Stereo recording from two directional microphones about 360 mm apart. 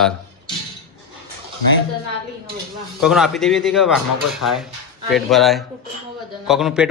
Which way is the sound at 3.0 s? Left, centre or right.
Centre.